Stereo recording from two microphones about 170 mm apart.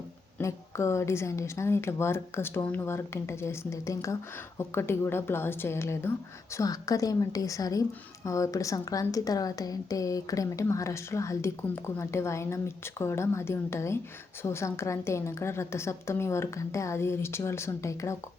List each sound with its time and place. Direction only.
0.3 s a woman's voice: 15° left (ahead or behind)